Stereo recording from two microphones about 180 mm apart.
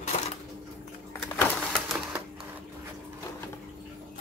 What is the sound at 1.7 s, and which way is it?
Typewriter, 10° right (ahead or behind).